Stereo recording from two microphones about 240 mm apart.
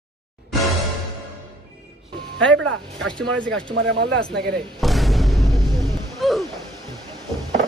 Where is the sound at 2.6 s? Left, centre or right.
Right.